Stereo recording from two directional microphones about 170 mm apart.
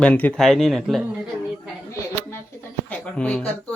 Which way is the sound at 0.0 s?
10° left (ahead or behind).